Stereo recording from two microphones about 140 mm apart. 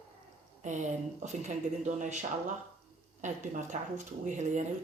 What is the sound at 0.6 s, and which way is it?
Speech, 60° right (ahead or behind).